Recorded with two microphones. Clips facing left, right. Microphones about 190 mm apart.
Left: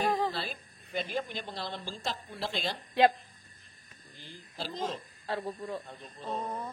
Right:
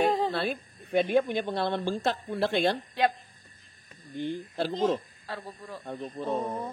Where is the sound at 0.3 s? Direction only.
60° right (ahead or behind).